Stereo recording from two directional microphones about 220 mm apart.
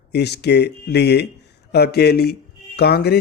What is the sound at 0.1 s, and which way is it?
Speech, 50° left (ahead or behind).